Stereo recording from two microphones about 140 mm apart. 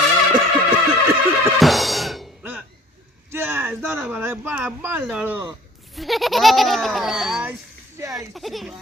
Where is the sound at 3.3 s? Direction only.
15° right (ahead or behind).